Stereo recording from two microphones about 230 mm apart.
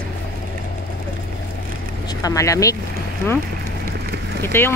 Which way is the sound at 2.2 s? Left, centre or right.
Centre.